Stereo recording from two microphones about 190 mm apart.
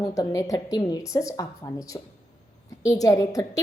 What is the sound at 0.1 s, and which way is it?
A woman's voice, 15° left (ahead or behind).